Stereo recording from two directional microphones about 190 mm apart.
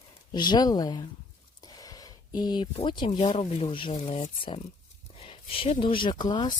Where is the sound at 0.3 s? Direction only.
25° left (ahead or behind).